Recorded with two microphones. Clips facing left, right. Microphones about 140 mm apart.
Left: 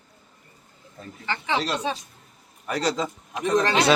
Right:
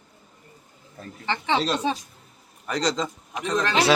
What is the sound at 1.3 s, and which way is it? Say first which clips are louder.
Speech: right 2 dB; 30° right (ahead or behind).